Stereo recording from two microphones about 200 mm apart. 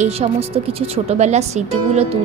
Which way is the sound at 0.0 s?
30° right (ahead or behind).